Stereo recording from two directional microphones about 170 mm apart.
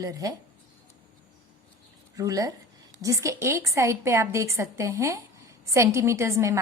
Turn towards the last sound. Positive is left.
turn(degrees=-15)  # may be behind; listen again after turning